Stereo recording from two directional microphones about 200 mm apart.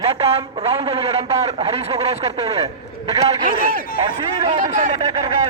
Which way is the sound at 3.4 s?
45° right (ahead or behind).